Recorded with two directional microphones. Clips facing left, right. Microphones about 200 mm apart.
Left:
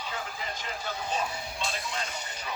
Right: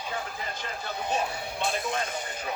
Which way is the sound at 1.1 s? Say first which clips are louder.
Right 4 dB; 55° right (ahead or behind).